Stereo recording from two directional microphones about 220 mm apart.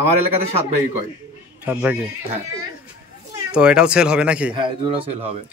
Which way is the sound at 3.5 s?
5° right (ahead or behind).